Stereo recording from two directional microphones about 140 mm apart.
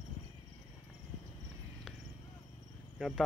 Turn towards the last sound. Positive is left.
turn(degrees=0)  # may be behind; listen again after turning